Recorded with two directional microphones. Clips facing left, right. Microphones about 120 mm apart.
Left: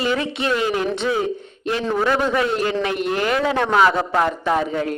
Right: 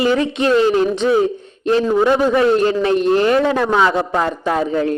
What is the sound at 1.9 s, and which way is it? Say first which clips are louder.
Speech: right 2 dB; 20° right (ahead or behind).